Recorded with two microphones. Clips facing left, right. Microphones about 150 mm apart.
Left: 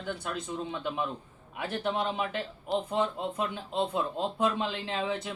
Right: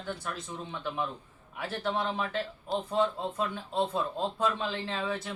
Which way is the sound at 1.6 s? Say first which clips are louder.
Left 1 dB; 20° left (ahead or behind).